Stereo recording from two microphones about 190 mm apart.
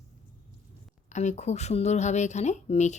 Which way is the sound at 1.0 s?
40° left (ahead or behind).